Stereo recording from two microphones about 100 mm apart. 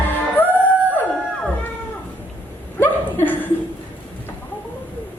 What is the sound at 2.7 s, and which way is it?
Chuckle, 20° left (ahead or behind).